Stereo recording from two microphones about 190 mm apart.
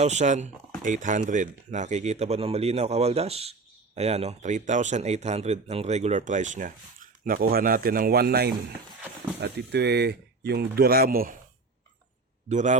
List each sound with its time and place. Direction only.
0.0 s speech: 35° right (ahead or behind)
12.5 s speech: 40° right (ahead or behind)